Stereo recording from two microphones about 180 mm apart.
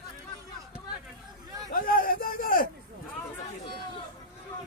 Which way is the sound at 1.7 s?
50° left (ahead or behind).